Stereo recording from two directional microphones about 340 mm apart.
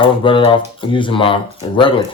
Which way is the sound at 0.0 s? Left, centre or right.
Centre.